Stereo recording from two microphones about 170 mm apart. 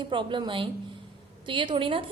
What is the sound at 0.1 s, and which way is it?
A woman's voice, 30° right (ahead or behind).